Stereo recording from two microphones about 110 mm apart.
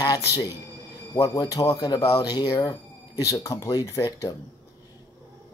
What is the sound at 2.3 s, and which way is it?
Speech, 45° left (ahead or behind).